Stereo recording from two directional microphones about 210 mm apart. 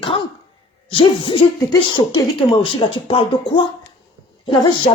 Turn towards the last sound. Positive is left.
turn(degrees=25)  # may be behind; listen again after turning